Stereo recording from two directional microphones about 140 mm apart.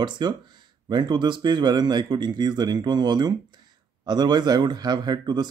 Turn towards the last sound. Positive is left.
turn(degrees=-30)  # may be behind; listen again after turning